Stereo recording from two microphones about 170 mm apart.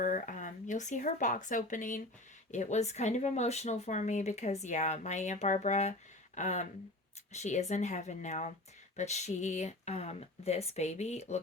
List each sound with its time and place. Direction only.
0.0 s speech: 50° left (ahead or behind)